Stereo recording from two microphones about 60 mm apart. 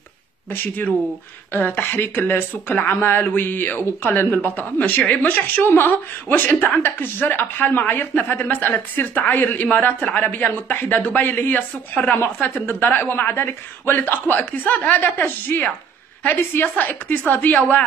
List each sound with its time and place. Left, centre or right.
0.5 s speech: left